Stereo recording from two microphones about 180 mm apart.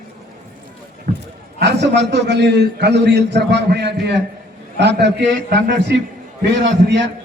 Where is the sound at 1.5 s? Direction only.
70° right (ahead or behind).